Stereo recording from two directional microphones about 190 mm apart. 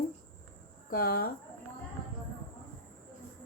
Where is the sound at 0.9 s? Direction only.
50° left (ahead or behind).